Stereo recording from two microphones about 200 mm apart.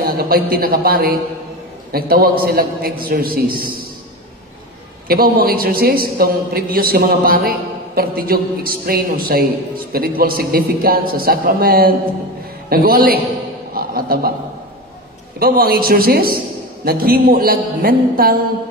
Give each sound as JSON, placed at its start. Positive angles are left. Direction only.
{"t": 0.0, "sound": "a man's voice", "side_deg": -50}
{"t": 5.0, "sound": "a man's voice", "side_deg": -50}
{"t": 15.3, "sound": "a man's voice", "side_deg": -50}